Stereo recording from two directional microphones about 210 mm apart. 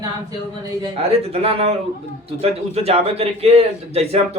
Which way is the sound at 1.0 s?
30° right (ahead or behind).